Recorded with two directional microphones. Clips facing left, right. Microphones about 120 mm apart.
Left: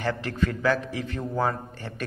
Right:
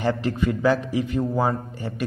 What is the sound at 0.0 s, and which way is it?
A man's voice, 15° right (ahead or behind).